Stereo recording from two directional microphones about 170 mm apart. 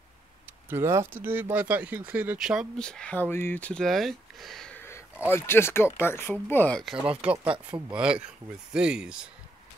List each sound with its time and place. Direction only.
0.7 s speech: 15° right (ahead or behind)
7.4 s speech: 30° right (ahead or behind)
7.9 s speech: 5° right (ahead or behind)